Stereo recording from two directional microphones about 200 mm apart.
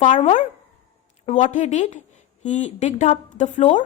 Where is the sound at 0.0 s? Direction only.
40° left (ahead or behind).